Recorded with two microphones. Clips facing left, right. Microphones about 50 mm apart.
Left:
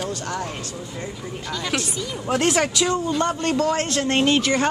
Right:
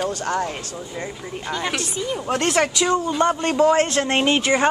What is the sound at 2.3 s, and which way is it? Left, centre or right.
Speech, centre.